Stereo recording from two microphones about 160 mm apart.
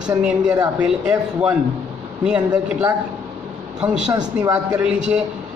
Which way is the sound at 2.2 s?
5° right (ahead or behind).